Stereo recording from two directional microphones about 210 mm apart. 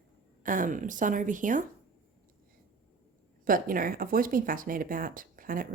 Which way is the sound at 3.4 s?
40° right (ahead or behind).